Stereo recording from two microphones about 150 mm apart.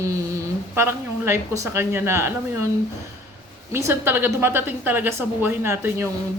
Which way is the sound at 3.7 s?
15° right (ahead or behind).